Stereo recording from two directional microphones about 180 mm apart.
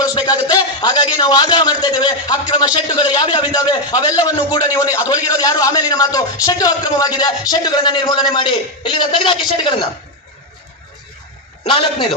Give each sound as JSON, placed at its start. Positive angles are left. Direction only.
{"t": 0.0, "sound": "a man's voice", "side_deg": 25}
{"t": 11.6, "sound": "a man's voice", "side_deg": 30}